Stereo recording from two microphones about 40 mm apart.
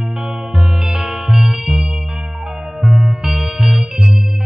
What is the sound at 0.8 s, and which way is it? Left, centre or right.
Music, centre.